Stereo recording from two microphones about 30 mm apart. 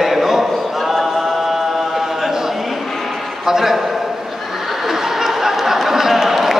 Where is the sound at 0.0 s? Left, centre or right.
Centre.